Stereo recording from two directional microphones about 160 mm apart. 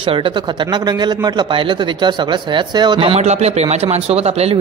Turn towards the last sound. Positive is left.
turn(degrees=-40)  # may be behind; listen again after turning